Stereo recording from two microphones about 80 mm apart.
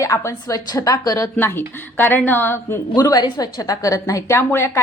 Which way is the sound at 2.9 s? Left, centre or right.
Left.